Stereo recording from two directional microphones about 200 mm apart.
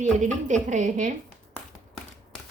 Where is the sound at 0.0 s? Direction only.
40° right (ahead or behind).